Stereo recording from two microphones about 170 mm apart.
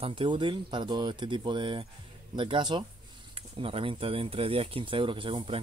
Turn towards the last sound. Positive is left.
turn(degrees=-30)  # may be behind; listen again after turning